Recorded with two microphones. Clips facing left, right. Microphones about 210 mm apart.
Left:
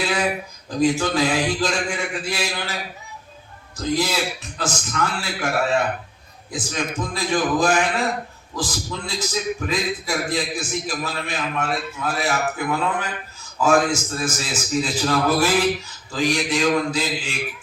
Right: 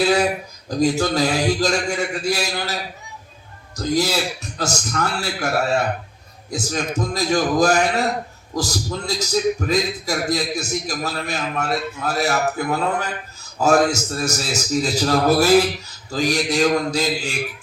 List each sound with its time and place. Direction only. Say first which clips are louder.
0.0 s a sound: right 6 dB; 40° right (ahead or behind)
0.8 s a man's voice: right 1 dB; 40° right (ahead or behind)
3.8 s a man's voice: right 2 dB; 40° right (ahead or behind)